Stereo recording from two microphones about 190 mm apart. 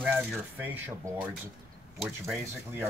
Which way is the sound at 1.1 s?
15° right (ahead or behind).